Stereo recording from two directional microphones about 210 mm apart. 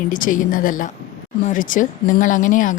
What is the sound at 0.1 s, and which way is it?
Speech, 40° left (ahead or behind).